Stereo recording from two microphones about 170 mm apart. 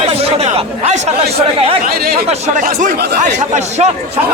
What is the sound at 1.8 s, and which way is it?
Speech, 60° right (ahead or behind).